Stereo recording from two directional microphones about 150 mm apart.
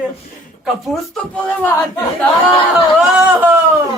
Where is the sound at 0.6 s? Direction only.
Centre (ahead or behind).